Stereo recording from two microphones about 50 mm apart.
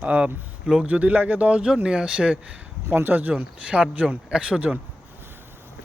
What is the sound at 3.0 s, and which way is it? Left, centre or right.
Speech, right.